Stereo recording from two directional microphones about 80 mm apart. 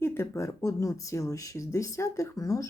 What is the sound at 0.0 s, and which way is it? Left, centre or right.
Speech, left.